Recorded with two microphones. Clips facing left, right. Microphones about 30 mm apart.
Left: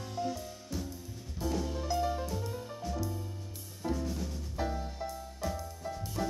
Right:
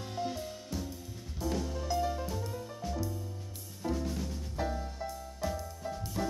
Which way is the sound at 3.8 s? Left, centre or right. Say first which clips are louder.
Even; centre.